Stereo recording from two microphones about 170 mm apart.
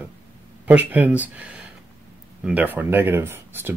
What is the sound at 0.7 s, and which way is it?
Speech, 10° right (ahead or behind).